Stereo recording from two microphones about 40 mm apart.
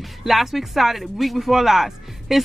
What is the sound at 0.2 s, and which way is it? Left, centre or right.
A woman's voice, centre.